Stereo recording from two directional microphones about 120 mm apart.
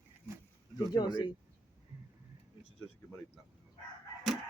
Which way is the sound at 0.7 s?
35° left (ahead or behind).